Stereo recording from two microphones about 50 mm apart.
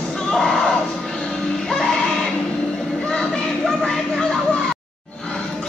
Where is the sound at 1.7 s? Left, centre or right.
Centre.